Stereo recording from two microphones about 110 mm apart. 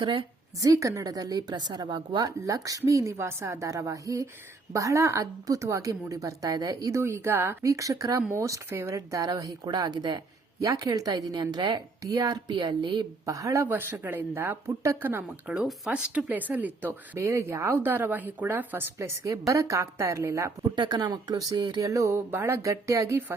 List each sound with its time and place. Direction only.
0.0 s speech: 45° right (ahead or behind)
0.7 s speech: 30° right (ahead or behind)
13.2 s speech: 30° right (ahead or behind)
13.7 s speech: 20° right (ahead or behind)
20.7 s speech: 40° right (ahead or behind)